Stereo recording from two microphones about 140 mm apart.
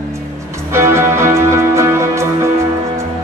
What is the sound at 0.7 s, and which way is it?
Music, 20° right (ahead or behind).